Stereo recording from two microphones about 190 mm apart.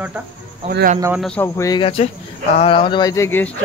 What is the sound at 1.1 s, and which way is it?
Speech, 5° left (ahead or behind).